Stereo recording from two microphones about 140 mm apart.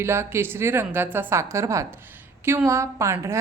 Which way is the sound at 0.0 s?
20° right (ahead or behind).